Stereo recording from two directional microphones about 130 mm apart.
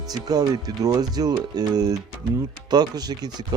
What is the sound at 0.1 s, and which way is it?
Speech, 30° right (ahead or behind).